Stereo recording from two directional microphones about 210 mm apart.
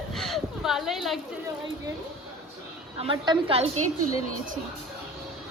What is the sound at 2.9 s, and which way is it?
Speech, 25° right (ahead or behind).